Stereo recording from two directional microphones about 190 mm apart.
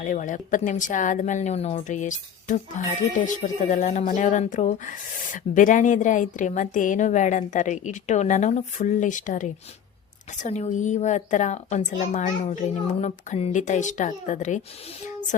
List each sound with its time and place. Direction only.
0.0 s a woman's voice: 40° left (ahead or behind)